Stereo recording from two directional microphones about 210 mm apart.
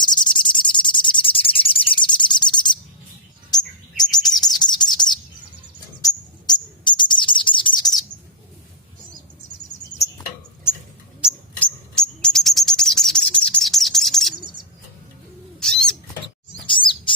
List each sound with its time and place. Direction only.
0.0 s bird: 20° left (ahead or behind)
3.9 s chirp: 20° left (ahead or behind)
6.5 s bird: 20° left (ahead or behind)
11.2 s bird: centre (ahead or behind)
15.6 s bird: 5° left (ahead or behind)
16.6 s chirp: 25° left (ahead or behind)